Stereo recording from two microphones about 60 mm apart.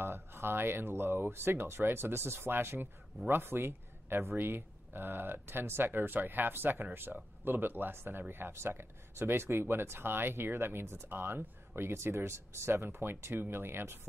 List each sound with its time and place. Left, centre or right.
0.0 s speech: right